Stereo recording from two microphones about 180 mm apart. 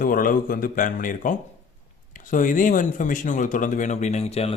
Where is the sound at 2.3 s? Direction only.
45° left (ahead or behind).